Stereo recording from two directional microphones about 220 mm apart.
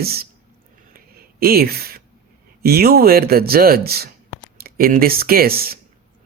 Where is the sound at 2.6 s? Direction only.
45° right (ahead or behind).